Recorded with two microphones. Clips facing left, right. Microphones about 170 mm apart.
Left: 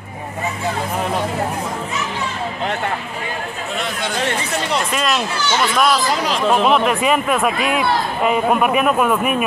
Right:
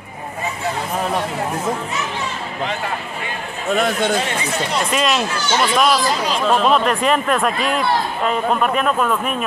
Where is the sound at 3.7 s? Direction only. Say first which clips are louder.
Right 9 dB; 45° right (ahead or behind).